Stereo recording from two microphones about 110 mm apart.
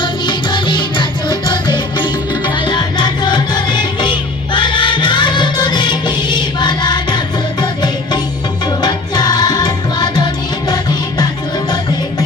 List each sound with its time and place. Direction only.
0.0 s music: 45° left (ahead or behind)